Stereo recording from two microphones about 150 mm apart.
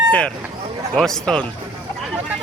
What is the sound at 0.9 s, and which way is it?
Speech, 5° left (ahead or behind).